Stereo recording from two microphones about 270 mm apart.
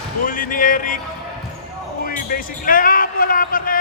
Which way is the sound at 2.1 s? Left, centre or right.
Left.